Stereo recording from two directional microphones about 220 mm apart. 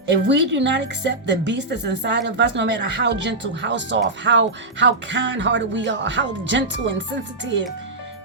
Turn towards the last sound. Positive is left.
turn(degrees=-55)  # may be behind; listen again after turning